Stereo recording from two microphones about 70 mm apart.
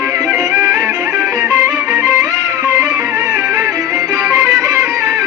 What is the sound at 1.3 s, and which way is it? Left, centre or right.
Music, right.